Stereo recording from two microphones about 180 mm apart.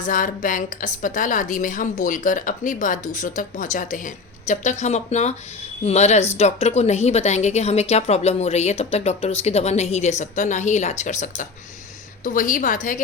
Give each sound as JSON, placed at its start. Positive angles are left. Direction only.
{"t": 0.0, "sound": "a woman's voice", "side_deg": 50}